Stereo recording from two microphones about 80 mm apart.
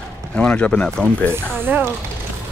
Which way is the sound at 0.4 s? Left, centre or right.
Centre.